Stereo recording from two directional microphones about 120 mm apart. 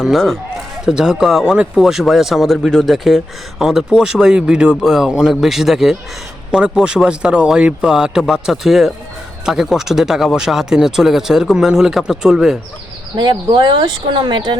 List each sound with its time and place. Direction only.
0.0 s speech: centre (ahead or behind)
13.1 s speech: 40° right (ahead or behind)